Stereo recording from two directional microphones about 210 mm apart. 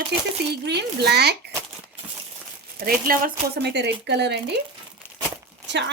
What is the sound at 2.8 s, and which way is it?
Speech, 45° right (ahead or behind).